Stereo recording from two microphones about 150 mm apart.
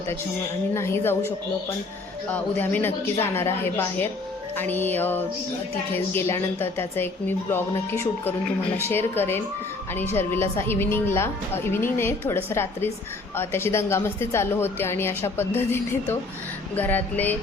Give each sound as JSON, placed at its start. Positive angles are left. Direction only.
{"t": 0.7, "sound": "a woman's voice", "side_deg": 15}
{"t": 2.3, "sound": "a woman's voice", "side_deg": 10}